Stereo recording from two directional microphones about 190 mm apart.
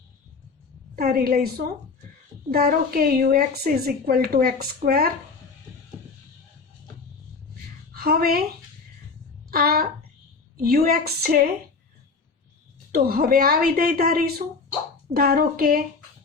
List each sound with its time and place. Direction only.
0.9 s a woman's voice: 50° right (ahead or behind)
7.9 s a woman's voice: 50° right (ahead or behind)
9.5 s a sound: 50° right (ahead or behind)
10.6 s a woman's voice: 50° right (ahead or behind)
12.9 s a woman's voice: 50° right (ahead or behind)